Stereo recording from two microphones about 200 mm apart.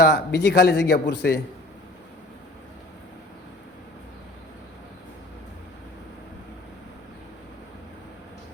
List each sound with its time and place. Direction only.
0.0 s speech: 55° left (ahead or behind)